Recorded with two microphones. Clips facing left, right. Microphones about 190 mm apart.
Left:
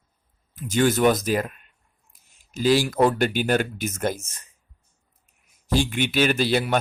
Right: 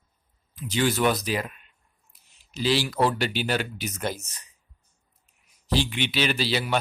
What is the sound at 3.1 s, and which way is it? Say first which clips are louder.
Speech: left 5 dB; 50° left (ahead or behind).